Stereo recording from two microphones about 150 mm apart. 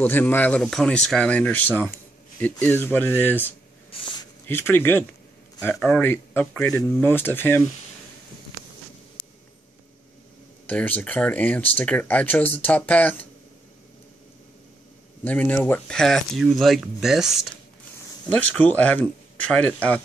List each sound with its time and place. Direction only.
0.0 s speech: 15° left (ahead or behind)
3.9 s a sound: 35° left (ahead or behind)
4.5 s speech: 15° left (ahead or behind)
10.7 s speech: 10° left (ahead or behind)
15.2 s speech: 10° left (ahead or behind)
18.3 s speech: 10° left (ahead or behind)